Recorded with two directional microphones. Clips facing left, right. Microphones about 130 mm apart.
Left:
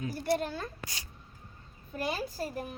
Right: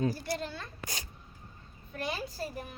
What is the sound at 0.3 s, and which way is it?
Speech, 50° left (ahead or behind).